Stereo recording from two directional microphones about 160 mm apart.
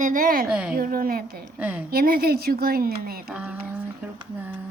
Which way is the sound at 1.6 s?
10° right (ahead or behind).